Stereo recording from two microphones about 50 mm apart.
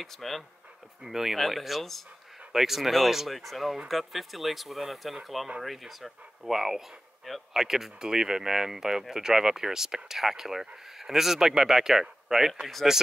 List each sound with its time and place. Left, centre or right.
0.0 s speech: centre